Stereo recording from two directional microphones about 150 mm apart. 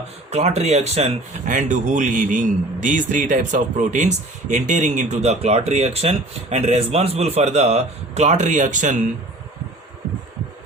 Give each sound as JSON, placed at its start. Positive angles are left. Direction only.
{"t": 0.3, "sound": "a man's voice", "side_deg": -45}
{"t": 1.5, "sound": "a man's voice", "side_deg": -60}